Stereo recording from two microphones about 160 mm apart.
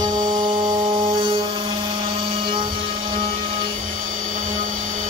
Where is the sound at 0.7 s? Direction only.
35° right (ahead or behind).